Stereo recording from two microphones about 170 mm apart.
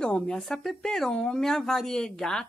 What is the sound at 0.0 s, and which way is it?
A woman's voice, 5° left (ahead or behind).